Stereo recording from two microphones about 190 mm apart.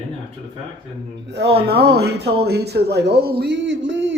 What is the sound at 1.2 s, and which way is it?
Speech, 60° right (ahead or behind).